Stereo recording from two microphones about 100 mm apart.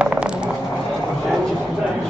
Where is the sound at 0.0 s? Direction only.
10° right (ahead or behind).